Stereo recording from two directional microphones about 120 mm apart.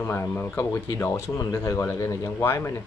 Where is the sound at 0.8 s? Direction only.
25° left (ahead or behind).